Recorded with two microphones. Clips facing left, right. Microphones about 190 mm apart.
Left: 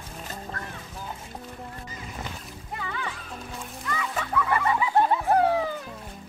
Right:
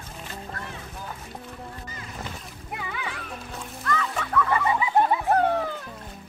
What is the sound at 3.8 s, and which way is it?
Music, 10° left (ahead or behind).